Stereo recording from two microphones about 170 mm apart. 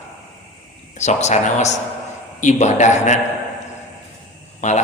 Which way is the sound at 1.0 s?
40° left (ahead or behind).